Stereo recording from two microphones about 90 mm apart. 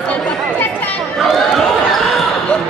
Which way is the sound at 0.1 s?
15° left (ahead or behind).